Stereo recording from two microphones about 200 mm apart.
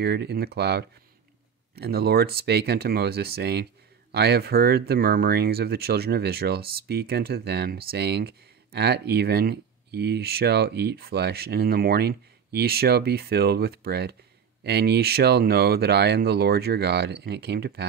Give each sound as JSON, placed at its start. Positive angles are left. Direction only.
{"t": 0.0, "sound": "speech", "side_deg": -55}